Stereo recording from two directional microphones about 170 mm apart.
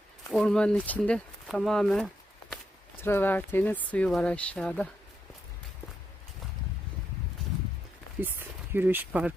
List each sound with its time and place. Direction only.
0.3 s speech: 5° left (ahead or behind)
3.0 s speech: 15° left (ahead or behind)
8.2 s speech: 10° right (ahead or behind)